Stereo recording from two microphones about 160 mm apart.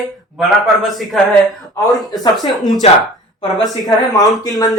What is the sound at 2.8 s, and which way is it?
Speech, 40° left (ahead or behind).